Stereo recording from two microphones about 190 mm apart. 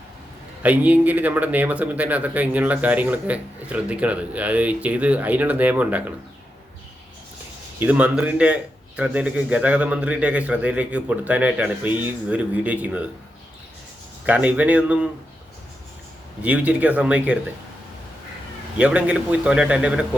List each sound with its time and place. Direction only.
0.6 s speech: 10° right (ahead or behind)
7.8 s speech: 5° right (ahead or behind)
14.3 s speech: 5° right (ahead or behind)
16.4 s speech: 5° right (ahead or behind)
18.8 s a man's voice: 5° right (ahead or behind)